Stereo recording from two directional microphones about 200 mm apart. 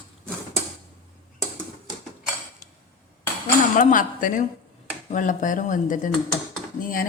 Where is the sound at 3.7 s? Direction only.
40° left (ahead or behind).